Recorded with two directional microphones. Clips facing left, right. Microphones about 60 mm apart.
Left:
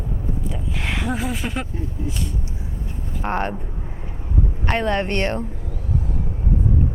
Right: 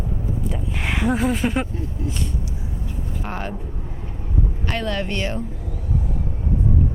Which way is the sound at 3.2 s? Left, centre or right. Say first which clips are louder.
Left 7 dB; left.